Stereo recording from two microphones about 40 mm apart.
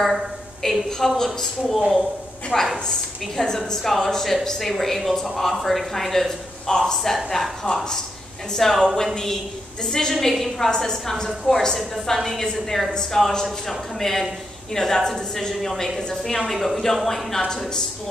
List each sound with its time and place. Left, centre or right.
0.6 s speech: centre
3.5 s speech: centre
7.6 s speech: centre
15.5 s speech: centre
16.0 s speech: centre
16.3 s speech: centre